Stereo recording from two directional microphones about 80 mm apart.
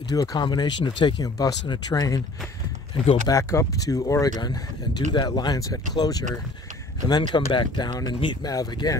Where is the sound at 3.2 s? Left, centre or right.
Left.